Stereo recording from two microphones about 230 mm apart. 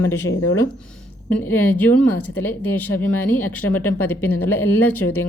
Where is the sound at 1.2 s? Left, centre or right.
Centre.